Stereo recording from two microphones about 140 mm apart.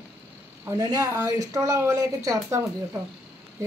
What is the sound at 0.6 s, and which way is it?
Speech, 25° right (ahead or behind).